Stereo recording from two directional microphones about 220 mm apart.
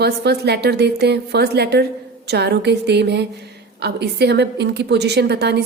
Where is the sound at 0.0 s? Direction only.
50° right (ahead or behind).